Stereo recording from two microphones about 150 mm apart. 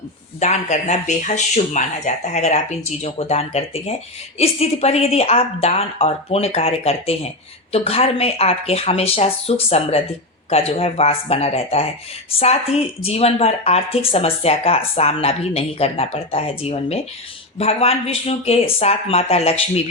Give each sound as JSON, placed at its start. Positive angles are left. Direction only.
{"t": 0.3, "sound": "speech", "side_deg": 50}